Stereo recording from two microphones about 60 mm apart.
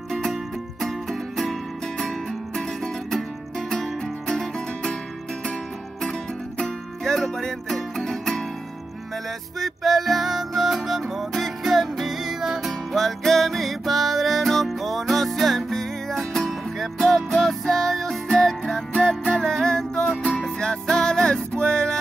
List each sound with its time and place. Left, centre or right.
0.1 s music: centre
4.3 s music: centre
6.6 s music: centre
9.6 s music: centre